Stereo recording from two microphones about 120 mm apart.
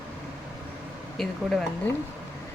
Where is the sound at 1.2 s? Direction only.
5° left (ahead or behind).